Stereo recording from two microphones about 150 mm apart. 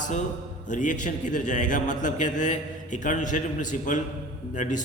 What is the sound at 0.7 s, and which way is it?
A man's voice, 55° left (ahead or behind).